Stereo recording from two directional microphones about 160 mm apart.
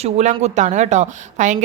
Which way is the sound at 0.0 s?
45° right (ahead or behind).